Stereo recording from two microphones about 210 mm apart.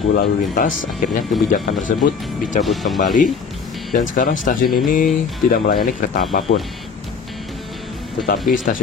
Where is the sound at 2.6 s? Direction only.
Centre (ahead or behind).